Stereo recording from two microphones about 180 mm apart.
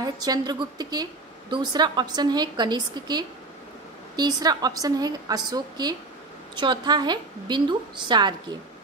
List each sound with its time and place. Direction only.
0.0 s a woman's voice: 20° right (ahead or behind)